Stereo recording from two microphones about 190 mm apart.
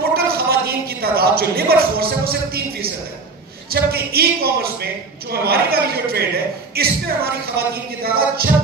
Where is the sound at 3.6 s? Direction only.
55° right (ahead or behind).